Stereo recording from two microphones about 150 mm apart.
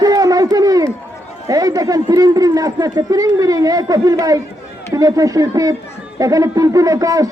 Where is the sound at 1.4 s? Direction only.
25° right (ahead or behind).